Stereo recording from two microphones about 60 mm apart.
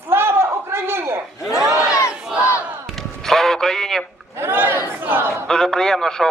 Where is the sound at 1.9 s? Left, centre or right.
Left.